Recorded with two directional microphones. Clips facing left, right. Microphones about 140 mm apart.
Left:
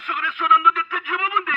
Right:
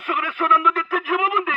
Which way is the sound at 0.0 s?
45° right (ahead or behind).